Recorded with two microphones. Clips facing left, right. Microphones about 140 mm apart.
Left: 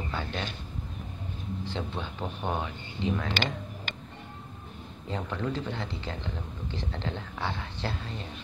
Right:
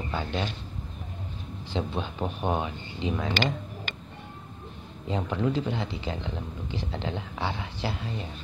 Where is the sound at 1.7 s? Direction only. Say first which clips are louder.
Right 9 dB; 15° right (ahead or behind).